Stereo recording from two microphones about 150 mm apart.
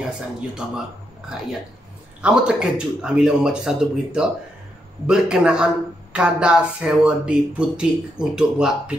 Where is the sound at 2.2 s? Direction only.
5° right (ahead or behind).